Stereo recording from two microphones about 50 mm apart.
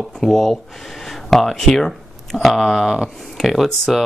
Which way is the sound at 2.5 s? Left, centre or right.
Centre.